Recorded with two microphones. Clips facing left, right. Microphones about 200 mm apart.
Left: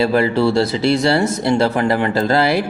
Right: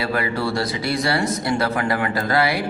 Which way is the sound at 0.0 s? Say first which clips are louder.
Left 8 dB; 25° left (ahead or behind).